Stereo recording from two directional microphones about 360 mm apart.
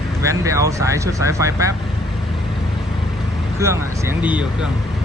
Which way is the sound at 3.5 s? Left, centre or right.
Centre.